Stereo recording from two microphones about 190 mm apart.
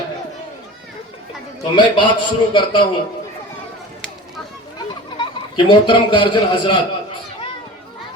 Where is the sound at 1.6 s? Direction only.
25° left (ahead or behind).